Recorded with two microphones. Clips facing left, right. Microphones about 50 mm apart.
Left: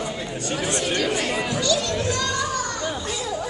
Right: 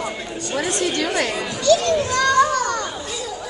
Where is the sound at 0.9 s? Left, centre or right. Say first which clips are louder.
Right 2 dB; right.